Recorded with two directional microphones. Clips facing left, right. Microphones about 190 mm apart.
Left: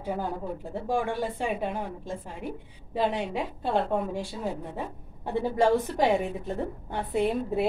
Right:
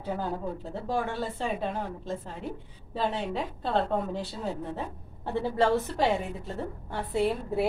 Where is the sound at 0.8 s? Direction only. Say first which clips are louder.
Left 2 dB; 15° left (ahead or behind).